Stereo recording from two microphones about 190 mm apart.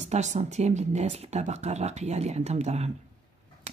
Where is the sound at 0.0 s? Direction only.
35° right (ahead or behind).